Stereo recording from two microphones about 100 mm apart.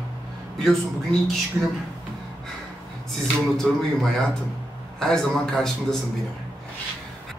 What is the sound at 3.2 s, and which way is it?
Speech, 5° left (ahead or behind).